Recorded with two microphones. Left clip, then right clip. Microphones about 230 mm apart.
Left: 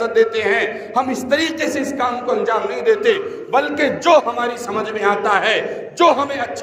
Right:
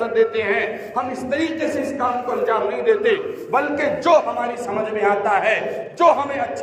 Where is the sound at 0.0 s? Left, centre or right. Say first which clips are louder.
Left 3 dB; left.